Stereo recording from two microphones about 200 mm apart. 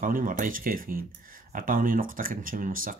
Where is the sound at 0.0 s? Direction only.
45° right (ahead or behind).